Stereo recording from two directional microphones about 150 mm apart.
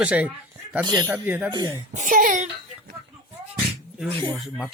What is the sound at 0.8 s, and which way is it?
Speech, 25° right (ahead or behind).